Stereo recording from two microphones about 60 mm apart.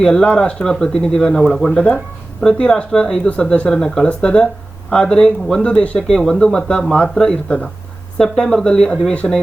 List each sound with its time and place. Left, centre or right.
0.0 s speech: centre
1.7 s speech: centre
6.1 s speech: centre